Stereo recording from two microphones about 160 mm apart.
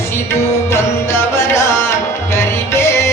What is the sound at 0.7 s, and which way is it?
Music, 15° left (ahead or behind).